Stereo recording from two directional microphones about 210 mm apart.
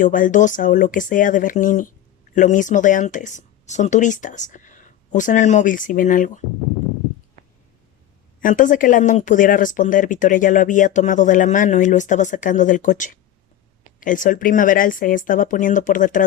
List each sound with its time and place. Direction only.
0.0 s speech: 40° left (ahead or behind)
8.4 s speech: 40° left (ahead or behind)